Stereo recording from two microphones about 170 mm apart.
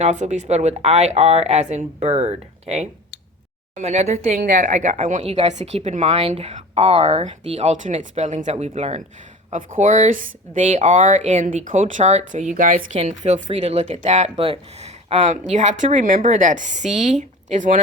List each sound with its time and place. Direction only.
0.0 s speech: 45° right (ahead or behind)